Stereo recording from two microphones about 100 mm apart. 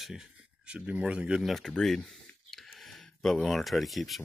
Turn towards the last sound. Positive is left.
turn(degrees=0)  # may be behind; listen again after turning